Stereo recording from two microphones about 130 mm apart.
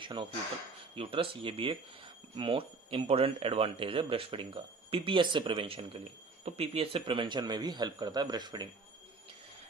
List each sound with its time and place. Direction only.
0.0 s a man's voice: 40° right (ahead or behind)